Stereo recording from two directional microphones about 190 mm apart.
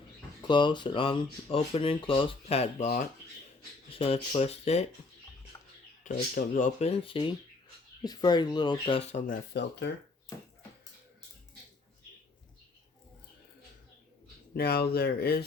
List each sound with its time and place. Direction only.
0.4 s speech: 25° left (ahead or behind)
5.5 s bird: 20° left (ahead or behind)
6.1 s speech: 45° left (ahead or behind); by 9.0 s 20° left (ahead or behind)
9.0 s speech: 35° left (ahead or behind); by 9.9 s 60° left (ahead or behind)
14.5 s speech: 55° left (ahead or behind)